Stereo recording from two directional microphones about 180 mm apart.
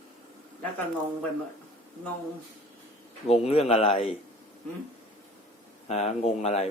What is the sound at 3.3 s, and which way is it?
Speech, 35° left (ahead or behind).